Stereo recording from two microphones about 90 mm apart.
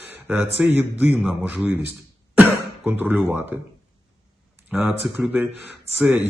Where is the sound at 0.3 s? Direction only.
15° right (ahead or behind).